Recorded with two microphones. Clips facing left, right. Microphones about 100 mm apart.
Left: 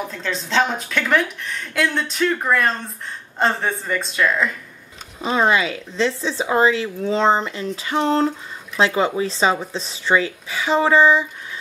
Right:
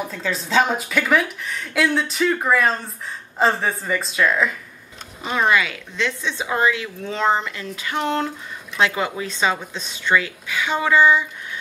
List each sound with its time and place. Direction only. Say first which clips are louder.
0.1 s a woman's voice: right 3 dB; 5° right (ahead or behind)
5.2 s speech: left 2 dB; 30° left (ahead or behind)